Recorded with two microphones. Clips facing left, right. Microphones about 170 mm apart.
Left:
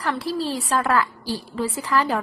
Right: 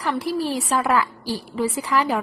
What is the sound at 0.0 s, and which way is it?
A woman's voice, 15° right (ahead or behind).